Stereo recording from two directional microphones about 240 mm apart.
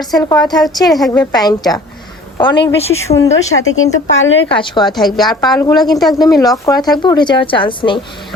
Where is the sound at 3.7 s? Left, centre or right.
Left.